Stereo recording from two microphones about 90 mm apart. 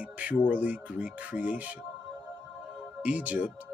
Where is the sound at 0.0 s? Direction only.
15° right (ahead or behind).